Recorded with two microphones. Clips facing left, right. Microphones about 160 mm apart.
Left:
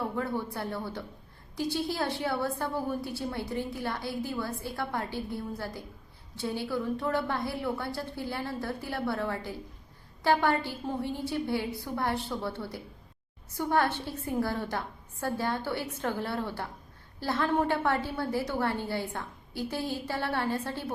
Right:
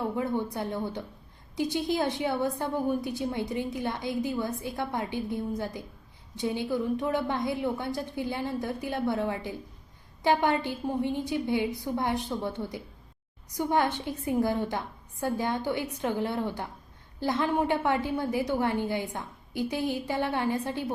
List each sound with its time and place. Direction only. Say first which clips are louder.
0.2 s a woman's voice: right 3 dB; 20° right (ahead or behind)